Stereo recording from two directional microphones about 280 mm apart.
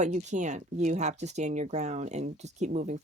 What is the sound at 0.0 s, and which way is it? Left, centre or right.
Speech, right.